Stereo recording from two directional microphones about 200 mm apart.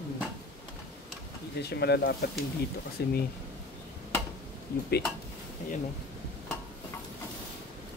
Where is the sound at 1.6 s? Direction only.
55° left (ahead or behind).